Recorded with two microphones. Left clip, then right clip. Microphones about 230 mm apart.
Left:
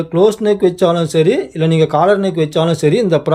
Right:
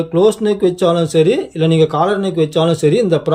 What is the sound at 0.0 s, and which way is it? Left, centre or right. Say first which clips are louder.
A man's voice: left 1 dB; centre.